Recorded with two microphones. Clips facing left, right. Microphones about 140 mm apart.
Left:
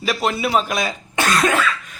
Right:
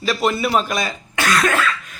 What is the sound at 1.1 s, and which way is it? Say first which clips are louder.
Cough: even; 20° left (ahead or behind).